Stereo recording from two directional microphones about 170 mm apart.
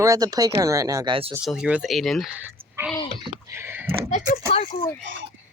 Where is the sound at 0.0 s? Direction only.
20° right (ahead or behind).